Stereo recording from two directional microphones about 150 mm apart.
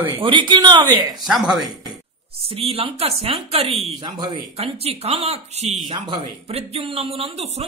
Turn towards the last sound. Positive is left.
turn(degrees=-40)  # may be behind; listen again after turning